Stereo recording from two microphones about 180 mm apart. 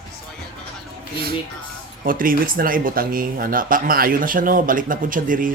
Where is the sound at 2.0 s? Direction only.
50° right (ahead or behind).